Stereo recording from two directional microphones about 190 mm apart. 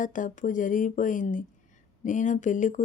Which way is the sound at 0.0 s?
45° left (ahead or behind).